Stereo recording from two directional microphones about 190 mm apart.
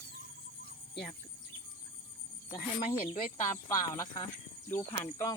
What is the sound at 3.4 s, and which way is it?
Speech, 15° left (ahead or behind).